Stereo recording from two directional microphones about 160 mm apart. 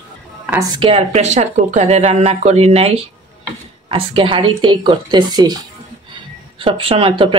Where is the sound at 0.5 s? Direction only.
25° right (ahead or behind).